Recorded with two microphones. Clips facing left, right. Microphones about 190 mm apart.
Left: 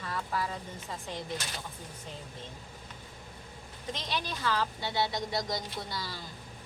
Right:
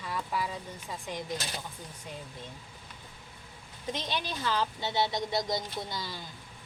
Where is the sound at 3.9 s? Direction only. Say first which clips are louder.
Right 1 dB; 20° right (ahead or behind).